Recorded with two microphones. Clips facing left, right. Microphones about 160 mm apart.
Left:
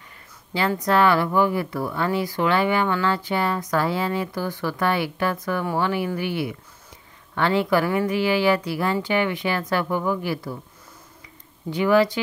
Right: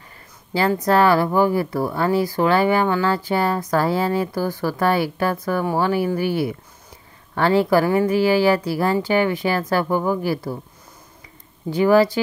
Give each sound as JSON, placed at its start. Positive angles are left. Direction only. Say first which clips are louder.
{"t": 0.5, "sound": "a woman's voice", "louder": "right 4 dB", "side_deg": -35}
{"t": 11.7, "sound": "speech", "louder": "right 3 dB", "side_deg": -40}